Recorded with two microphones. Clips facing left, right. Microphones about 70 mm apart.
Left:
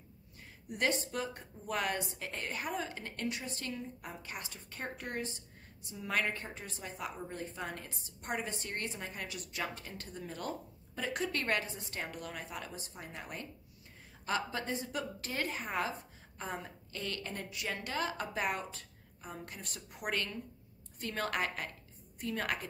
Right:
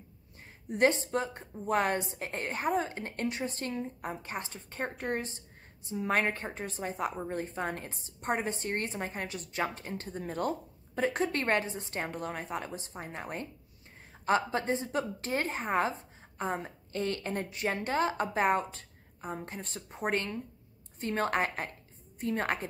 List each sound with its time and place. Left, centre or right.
0.7 s a woman's voice: right